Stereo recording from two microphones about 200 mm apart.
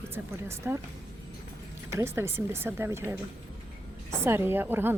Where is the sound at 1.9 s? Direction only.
10° right (ahead or behind).